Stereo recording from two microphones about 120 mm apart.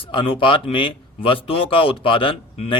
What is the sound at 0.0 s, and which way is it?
Speech, 45° left (ahead or behind).